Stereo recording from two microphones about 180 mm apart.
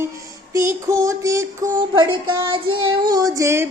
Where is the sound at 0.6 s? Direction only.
15° right (ahead or behind).